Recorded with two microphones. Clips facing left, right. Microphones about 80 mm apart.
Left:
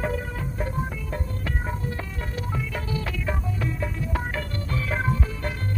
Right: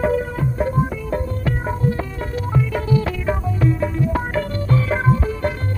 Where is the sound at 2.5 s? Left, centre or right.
Right.